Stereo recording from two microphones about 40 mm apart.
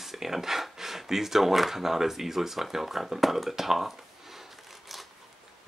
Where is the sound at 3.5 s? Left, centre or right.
Centre.